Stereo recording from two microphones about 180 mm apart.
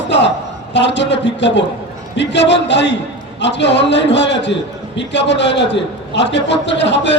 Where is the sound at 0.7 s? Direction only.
75° left (ahead or behind).